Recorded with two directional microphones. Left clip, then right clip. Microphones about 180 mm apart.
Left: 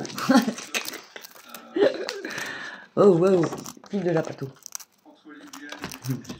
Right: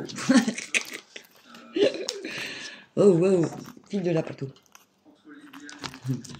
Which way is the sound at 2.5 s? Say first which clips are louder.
Left 3 dB; 10° right (ahead or behind).